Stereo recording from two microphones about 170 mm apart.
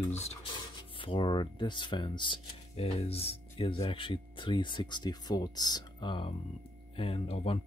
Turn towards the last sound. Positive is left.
turn(degrees=35)  # may be behind; listen again after turning